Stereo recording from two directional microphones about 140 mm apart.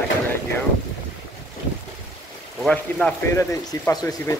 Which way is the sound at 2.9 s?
15° left (ahead or behind).